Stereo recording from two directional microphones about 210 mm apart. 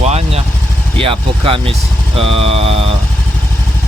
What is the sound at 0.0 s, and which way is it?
Vehicle, 30° right (ahead or behind).